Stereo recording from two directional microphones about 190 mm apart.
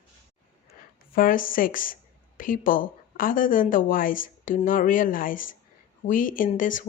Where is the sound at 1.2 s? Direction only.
45° left (ahead or behind).